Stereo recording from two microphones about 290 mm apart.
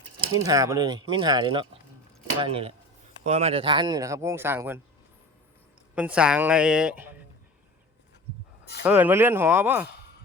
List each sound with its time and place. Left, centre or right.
0.4 s speech: centre
5.9 s speech: centre
8.8 s speech: centre